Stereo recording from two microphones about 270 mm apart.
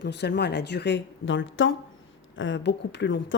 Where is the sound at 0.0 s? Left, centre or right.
Left.